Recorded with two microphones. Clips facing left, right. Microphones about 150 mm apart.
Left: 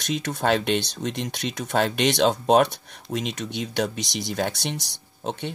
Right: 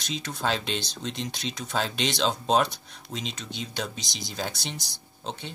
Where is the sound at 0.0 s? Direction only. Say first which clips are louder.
Left 5 dB; 65° left (ahead or behind).